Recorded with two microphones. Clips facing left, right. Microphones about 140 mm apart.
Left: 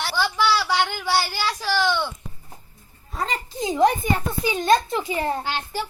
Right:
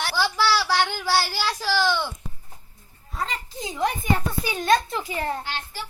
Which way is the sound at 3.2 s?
40° left (ahead or behind).